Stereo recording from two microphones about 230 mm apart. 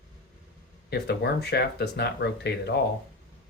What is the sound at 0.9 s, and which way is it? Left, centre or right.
Speech, left.